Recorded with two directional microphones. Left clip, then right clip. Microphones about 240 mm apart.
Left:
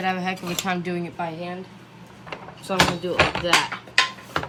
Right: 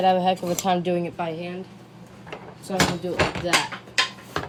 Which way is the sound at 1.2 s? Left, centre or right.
Centre.